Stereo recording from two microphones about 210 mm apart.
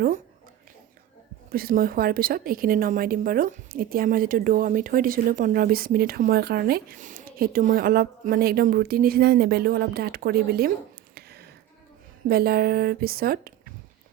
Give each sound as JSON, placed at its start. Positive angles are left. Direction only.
{"t": 1.5, "sound": "a woman's voice", "side_deg": -45}